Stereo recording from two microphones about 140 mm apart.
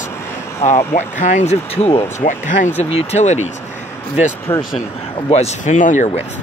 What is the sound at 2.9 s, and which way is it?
Speech, 50° left (ahead or behind).